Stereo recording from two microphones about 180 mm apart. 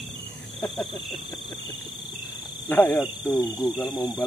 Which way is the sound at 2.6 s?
10° left (ahead or behind).